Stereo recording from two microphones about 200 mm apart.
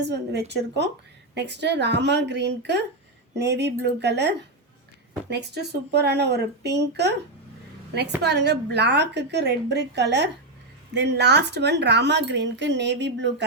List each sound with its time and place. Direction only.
0.0 s speech: 60° right (ahead or behind)
8.2 s speech: 55° right (ahead or behind)